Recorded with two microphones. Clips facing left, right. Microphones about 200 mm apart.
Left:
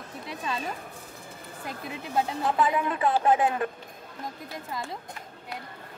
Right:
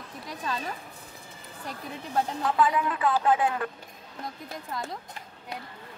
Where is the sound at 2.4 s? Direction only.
25° left (ahead or behind).